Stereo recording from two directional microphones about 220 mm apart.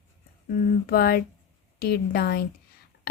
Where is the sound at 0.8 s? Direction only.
45° left (ahead or behind).